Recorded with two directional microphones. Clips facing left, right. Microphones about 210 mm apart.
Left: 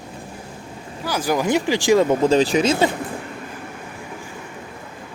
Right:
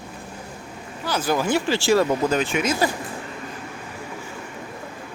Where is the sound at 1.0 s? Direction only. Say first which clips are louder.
Left 2 dB; 10° left (ahead or behind).